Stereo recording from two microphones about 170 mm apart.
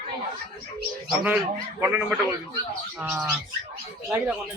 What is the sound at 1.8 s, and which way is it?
Speech, 10° right (ahead or behind).